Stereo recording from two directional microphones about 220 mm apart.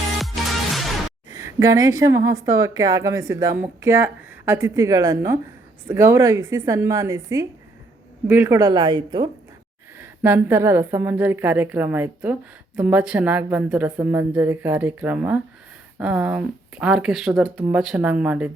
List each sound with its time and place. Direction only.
0.2 s music: centre (ahead or behind)
1.3 s a woman's voice: 15° right (ahead or behind)
10.0 s a woman's voice: 10° right (ahead or behind)